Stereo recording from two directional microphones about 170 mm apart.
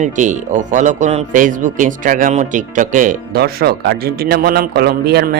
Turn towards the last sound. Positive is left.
turn(degrees=-70)  # may be behind; listen again after turning